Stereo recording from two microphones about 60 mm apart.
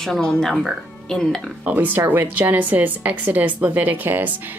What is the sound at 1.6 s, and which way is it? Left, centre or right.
A woman's voice, right.